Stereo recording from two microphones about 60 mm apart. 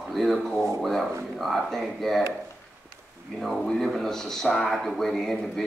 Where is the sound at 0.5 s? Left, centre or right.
Centre.